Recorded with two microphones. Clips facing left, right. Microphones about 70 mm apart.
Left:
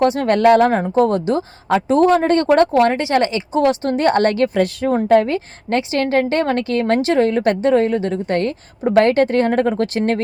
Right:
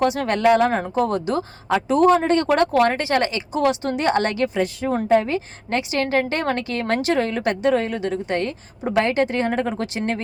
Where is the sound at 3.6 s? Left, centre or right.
Left.